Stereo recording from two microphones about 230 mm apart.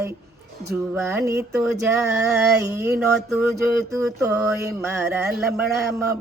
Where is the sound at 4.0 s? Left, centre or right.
Centre.